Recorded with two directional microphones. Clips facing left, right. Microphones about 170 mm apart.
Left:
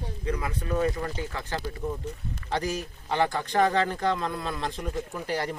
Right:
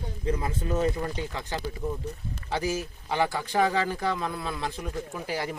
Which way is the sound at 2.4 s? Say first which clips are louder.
Right 1 dB; 5° right (ahead or behind).